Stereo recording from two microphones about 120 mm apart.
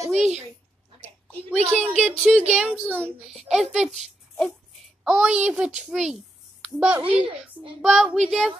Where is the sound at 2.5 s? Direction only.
10° right (ahead or behind).